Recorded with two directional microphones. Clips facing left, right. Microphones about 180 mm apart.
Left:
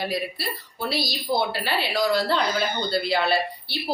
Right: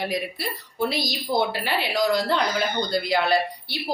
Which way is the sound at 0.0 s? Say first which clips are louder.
Even; 20° right (ahead or behind).